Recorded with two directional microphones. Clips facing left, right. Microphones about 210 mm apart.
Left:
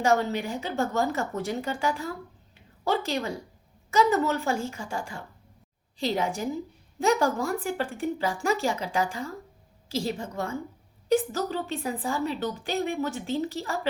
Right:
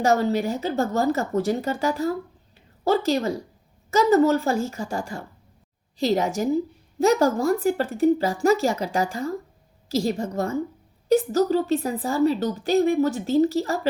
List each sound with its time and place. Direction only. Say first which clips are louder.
0.0 s a woman's voice: right 4 dB; 35° right (ahead or behind)